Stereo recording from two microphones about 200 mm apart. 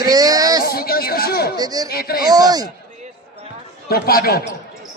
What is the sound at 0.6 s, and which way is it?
Speech, 50° left (ahead or behind).